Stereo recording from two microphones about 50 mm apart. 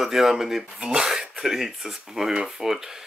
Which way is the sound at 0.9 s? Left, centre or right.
Centre.